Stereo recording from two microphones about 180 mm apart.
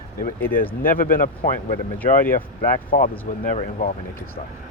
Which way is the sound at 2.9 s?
50° left (ahead or behind).